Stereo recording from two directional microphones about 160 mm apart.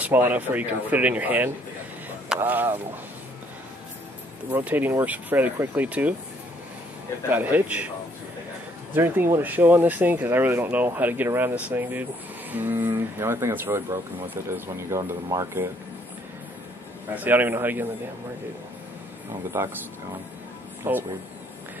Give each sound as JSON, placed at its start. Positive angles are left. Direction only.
{"t": 0.0, "sound": "speech", "side_deg": -10}
{"t": 4.5, "sound": "speech", "side_deg": -10}
{"t": 7.2, "sound": "speech", "side_deg": -10}
{"t": 8.9, "sound": "speech", "side_deg": -15}
{"t": 17.1, "sound": "speech", "side_deg": -10}
{"t": 19.6, "sound": "speech", "side_deg": -15}
{"t": 20.9, "sound": "speech", "side_deg": -15}